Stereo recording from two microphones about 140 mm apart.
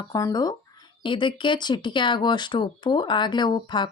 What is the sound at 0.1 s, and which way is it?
Speech, 25° left (ahead or behind).